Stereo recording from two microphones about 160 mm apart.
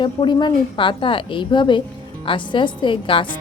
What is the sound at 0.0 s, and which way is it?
A woman's voice, 30° left (ahead or behind).